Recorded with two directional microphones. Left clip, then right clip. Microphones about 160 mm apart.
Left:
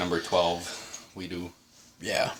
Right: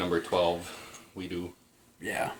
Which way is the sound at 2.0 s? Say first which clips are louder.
Left 4 dB; 60° left (ahead or behind).